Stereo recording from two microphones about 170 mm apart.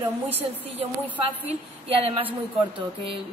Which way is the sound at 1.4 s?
35° right (ahead or behind).